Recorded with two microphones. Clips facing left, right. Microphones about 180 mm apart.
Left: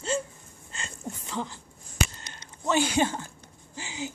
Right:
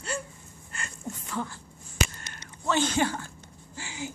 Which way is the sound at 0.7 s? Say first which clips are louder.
Even; 20° left (ahead or behind).